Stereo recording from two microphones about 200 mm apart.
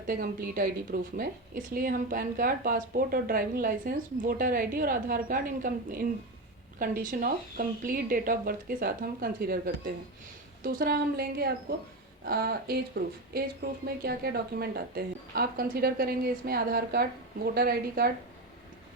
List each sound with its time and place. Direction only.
0.1 s a woman's voice: 50° right (ahead or behind)